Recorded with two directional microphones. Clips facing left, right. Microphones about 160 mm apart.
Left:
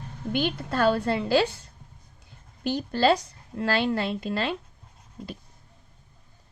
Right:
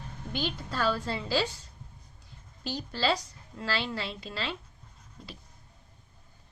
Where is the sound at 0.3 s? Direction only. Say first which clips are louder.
Left 7 dB; 55° left (ahead or behind).